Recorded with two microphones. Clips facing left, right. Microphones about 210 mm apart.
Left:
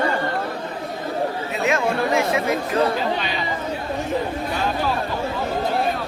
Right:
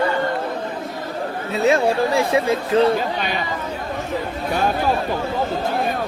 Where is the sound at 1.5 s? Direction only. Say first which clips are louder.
Right 5 dB; 35° right (ahead or behind).